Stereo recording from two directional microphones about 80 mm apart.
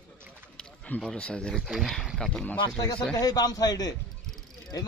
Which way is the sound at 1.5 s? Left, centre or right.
Centre.